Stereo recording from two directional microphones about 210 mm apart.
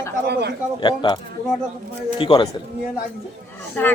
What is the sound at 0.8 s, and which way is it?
Speech, 20° left (ahead or behind).